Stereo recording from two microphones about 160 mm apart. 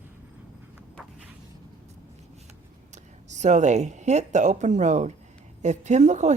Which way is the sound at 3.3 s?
50° right (ahead or behind).